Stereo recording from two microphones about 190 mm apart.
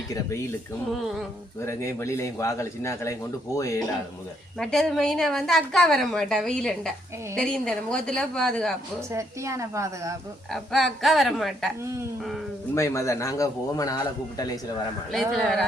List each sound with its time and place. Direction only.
0.9 s a woman's voice: centre (ahead or behind)
1.6 s a man's voice: 15° left (ahead or behind)
4.5 s a woman's voice: centre (ahead or behind)
9.0 s a woman's voice: 15° right (ahead or behind)
10.5 s a woman's voice: centre (ahead or behind)
12.7 s a man's voice: 15° left (ahead or behind)
15.1 s a woman's voice: centre (ahead or behind)